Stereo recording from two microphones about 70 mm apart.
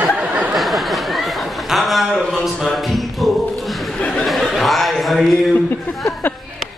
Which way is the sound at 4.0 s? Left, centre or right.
Centre.